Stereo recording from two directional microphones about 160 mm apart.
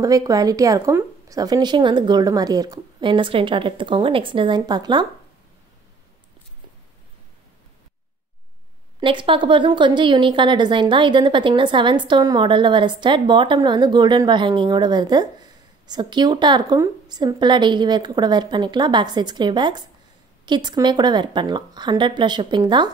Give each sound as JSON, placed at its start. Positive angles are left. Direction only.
{"t": 0.0, "sound": "a woman's voice", "side_deg": -20}
{"t": 9.0, "sound": "a woman's voice", "side_deg": -30}